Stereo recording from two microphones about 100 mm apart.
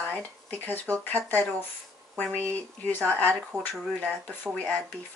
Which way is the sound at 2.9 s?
15° left (ahead or behind).